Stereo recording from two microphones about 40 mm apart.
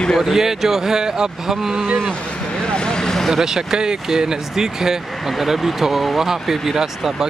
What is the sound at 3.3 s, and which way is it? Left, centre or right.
Speech, centre.